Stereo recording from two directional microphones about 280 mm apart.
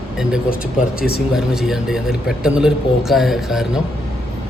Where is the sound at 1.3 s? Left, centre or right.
Centre.